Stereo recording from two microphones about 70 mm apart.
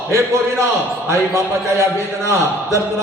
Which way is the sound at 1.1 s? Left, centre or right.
Right.